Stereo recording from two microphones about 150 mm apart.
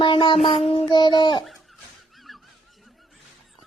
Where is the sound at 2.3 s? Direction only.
Centre (ahead or behind).